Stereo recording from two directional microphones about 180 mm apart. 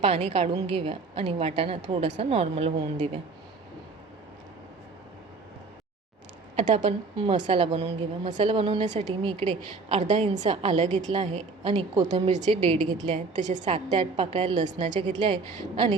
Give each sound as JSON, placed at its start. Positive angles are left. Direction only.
{"t": 0.0, "sound": "a woman's voice", "side_deg": -35}
{"t": 6.6, "sound": "a woman's voice", "side_deg": -45}
{"t": 7.4, "sound": "a woman's voice", "side_deg": -30}